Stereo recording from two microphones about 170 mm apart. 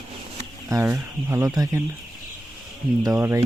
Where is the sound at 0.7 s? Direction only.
15° right (ahead or behind).